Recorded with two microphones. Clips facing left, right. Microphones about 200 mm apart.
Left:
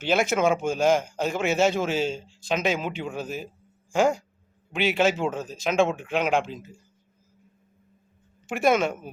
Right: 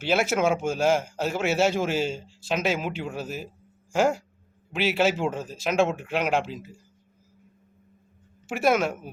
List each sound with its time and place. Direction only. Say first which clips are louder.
0.0 s a man's voice: left 1 dB; 5° right (ahead or behind)
8.4 s speech: left 1 dB; 5° right (ahead or behind)